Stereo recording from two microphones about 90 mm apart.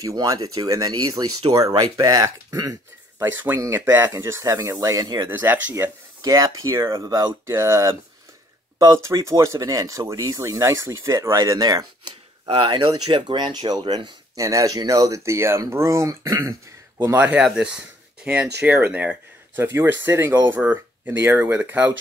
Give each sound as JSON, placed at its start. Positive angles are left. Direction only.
{"t": 0.0, "sound": "speech", "side_deg": -40}
{"t": 3.2, "sound": "speech", "side_deg": -25}
{"t": 5.4, "sound": "speech", "side_deg": -20}
{"t": 6.2, "sound": "speech", "side_deg": -40}
{"t": 12.6, "sound": "speech", "side_deg": -60}
{"t": 13.5, "sound": "speech", "side_deg": -50}
{"t": 14.4, "sound": "speech", "side_deg": -40}
{"t": 17.0, "sound": "speech", "side_deg": -20}